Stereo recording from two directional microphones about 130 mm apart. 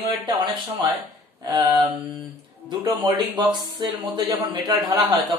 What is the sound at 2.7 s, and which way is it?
Speech, 40° right (ahead or behind).